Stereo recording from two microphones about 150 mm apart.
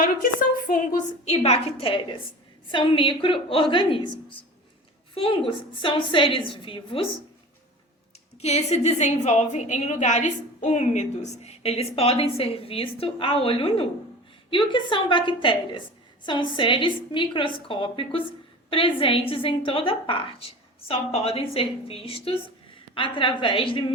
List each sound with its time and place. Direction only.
0.0 s a woman's voice: 65° left (ahead or behind); by 7.2 s 35° left (ahead or behind)
8.4 s a woman's voice: 45° left (ahead or behind)